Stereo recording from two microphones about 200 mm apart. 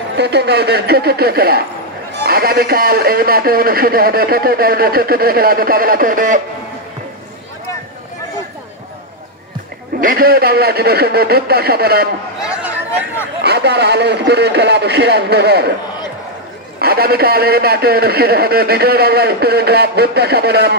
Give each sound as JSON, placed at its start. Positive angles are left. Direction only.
{"t": 0.2, "sound": "a man's voice", "side_deg": -55}
{"t": 9.9, "sound": "a man's voice", "side_deg": -45}
{"t": 12.4, "sound": "a sound", "side_deg": -10}
{"t": 13.4, "sound": "a man's voice", "side_deg": -55}
{"t": 16.8, "sound": "a man's voice", "side_deg": -50}